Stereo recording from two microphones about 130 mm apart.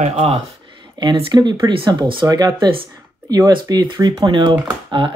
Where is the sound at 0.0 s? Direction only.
55° right (ahead or behind).